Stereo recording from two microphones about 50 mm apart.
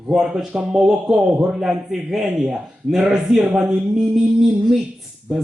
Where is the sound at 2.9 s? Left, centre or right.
Centre.